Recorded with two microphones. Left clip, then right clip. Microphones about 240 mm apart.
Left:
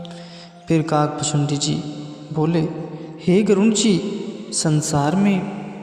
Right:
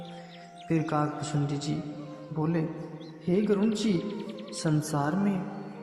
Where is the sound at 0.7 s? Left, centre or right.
Left.